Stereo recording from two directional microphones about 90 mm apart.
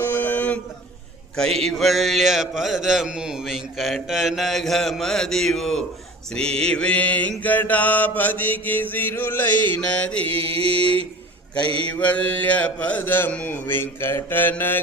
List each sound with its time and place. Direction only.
0.0 s a sound: 20° left (ahead or behind)
1.4 s mantra: 5° left (ahead or behind)
10.5 s mantra: 90° right
11.9 s speech: 15° left (ahead or behind)